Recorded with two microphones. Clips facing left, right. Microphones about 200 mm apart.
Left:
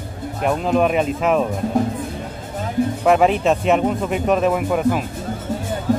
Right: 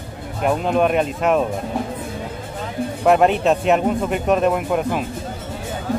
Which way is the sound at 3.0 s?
Centre (ahead or behind).